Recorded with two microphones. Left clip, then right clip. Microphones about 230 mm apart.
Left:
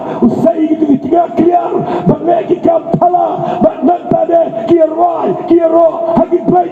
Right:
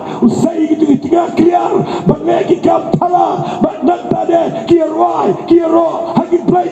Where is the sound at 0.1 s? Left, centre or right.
Right.